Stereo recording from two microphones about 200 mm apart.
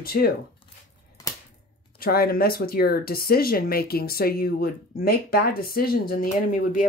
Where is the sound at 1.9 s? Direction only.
50° left (ahead or behind).